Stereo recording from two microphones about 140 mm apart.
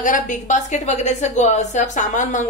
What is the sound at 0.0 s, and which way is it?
A woman's voice, 65° left (ahead or behind).